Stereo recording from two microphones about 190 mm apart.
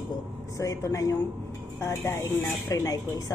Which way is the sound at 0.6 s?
15° left (ahead or behind).